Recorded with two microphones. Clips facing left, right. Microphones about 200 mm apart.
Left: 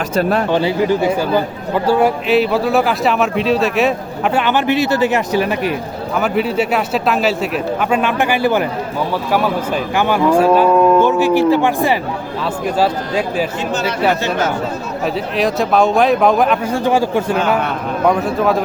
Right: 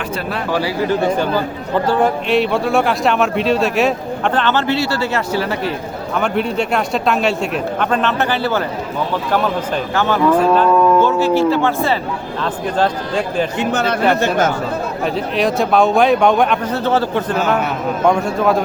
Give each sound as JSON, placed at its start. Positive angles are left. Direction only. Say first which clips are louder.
{"t": 0.2, "sound": "speech", "louder": "left 8 dB", "side_deg": 45}
{"t": 0.9, "sound": "speech", "louder": "left 1 dB", "side_deg": 10}
{"t": 6.1, "sound": "speech", "louder": "left 2 dB", "side_deg": 5}
{"t": 9.9, "sound": "speech", "louder": "left 1 dB", "side_deg": 15}
{"t": 13.6, "sound": "speech", "louder": "right 1 dB", "side_deg": -55}
{"t": 15.0, "sound": "speech", "louder": "left 1 dB", "side_deg": 0}
{"t": 16.7, "sound": "speech", "louder": "left 2 dB", "side_deg": 10}